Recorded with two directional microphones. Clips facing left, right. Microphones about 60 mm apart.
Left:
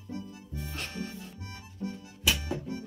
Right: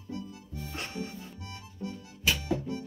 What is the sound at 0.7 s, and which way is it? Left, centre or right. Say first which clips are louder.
Music: right 1 dB; right.